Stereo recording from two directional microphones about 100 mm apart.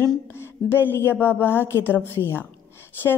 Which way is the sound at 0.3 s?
25° left (ahead or behind).